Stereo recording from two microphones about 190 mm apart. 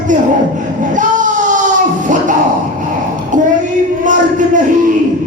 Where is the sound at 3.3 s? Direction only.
45° right (ahead or behind).